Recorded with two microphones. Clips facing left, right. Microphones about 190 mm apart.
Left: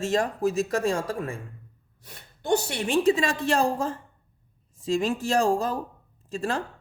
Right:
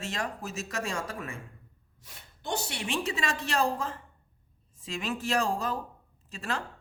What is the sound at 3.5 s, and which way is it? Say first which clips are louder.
Speech: left 4 dB; 50° left (ahead or behind).